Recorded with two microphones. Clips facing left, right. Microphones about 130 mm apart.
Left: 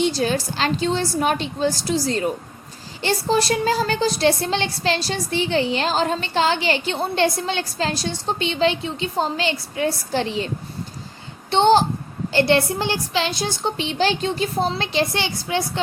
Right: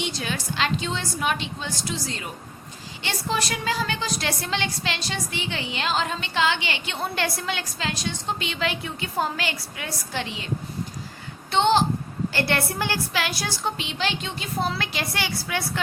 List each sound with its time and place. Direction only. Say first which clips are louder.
0.0 s speech: left 9 dB; 35° left (ahead or behind)
11.5 s speech: left 5 dB; 35° left (ahead or behind)
12.3 s a woman's voice: left 9 dB; 25° left (ahead or behind)